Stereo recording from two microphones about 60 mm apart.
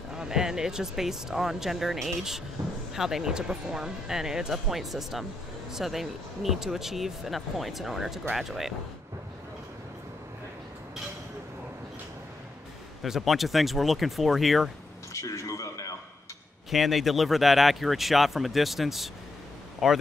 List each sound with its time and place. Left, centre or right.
0.1 s speech: centre
13.0 s speech: centre
15.1 s a sound: left
16.7 s speech: centre